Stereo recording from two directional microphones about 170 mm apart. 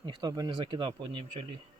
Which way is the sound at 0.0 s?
25° right (ahead or behind).